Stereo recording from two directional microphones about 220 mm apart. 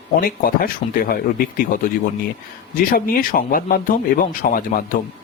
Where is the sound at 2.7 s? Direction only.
40° left (ahead or behind).